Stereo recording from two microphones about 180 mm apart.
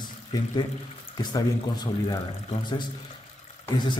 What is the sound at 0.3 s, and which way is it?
Speech, 20° left (ahead or behind).